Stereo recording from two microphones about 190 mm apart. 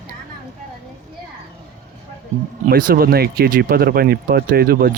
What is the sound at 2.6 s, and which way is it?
Speech, 50° right (ahead or behind).